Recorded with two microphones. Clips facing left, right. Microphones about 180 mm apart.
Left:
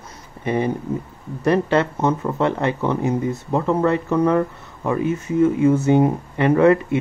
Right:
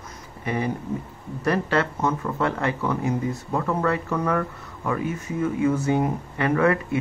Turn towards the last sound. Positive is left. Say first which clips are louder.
# left 6 dB
turn(degrees=25)  # may be behind; listen again after turning